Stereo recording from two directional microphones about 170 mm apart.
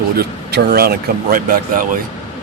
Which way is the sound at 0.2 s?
65° right (ahead or behind).